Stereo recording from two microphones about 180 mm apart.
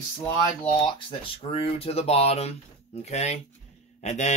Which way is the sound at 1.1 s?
30° left (ahead or behind).